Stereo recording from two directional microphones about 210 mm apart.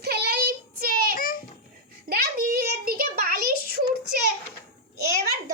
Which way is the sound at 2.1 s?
45° right (ahead or behind).